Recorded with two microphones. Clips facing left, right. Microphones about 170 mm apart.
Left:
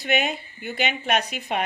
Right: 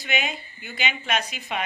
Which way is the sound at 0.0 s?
55° left (ahead or behind).